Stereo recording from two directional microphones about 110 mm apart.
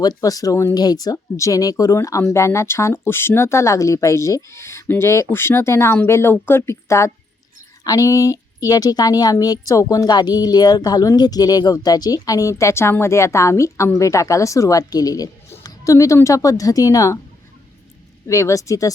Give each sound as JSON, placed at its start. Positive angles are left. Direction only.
{"t": 0.0, "sound": "speech", "side_deg": 35}
{"t": 18.3, "sound": "speech", "side_deg": 30}